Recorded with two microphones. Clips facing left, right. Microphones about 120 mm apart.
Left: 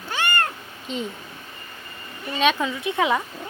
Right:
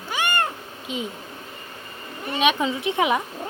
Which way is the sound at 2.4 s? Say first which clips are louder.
Even; 15° right (ahead or behind).